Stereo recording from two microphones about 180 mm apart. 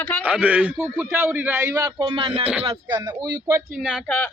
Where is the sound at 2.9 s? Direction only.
15° right (ahead or behind).